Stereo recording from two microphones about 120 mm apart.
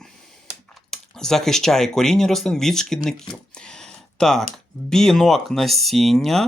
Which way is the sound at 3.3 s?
5° left (ahead or behind).